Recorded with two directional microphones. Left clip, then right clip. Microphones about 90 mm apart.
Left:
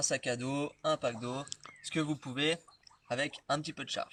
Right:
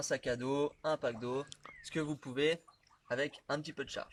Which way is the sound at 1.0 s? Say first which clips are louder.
Left 1 dB; 55° right (ahead or behind).